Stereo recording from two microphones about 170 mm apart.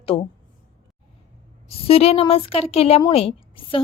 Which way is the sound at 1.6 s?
35° left (ahead or behind).